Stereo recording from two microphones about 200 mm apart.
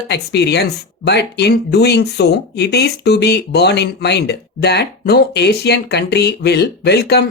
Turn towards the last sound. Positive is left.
turn(degrees=55)  # may be behind; listen again after turning